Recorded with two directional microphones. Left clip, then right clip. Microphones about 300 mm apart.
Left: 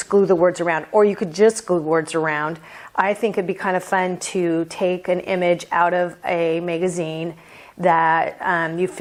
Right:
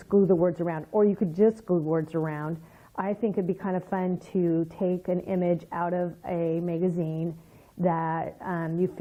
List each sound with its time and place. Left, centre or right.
0.1 s speech: centre
6.9 s speech: left
7.8 s speech: centre